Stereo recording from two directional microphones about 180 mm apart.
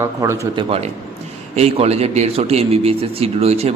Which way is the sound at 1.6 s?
35° right (ahead or behind).